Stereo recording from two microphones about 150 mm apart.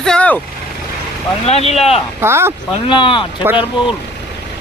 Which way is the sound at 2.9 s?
35° left (ahead or behind).